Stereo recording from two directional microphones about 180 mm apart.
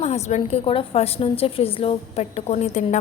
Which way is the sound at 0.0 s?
35° left (ahead or behind).